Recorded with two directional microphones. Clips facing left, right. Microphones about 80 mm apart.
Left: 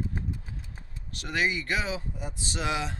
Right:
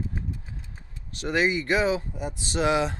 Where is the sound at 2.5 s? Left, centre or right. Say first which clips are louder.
Right 7 dB; right.